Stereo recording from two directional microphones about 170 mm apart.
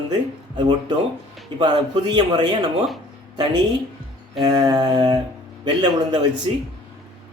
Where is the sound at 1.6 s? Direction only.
25° right (ahead or behind).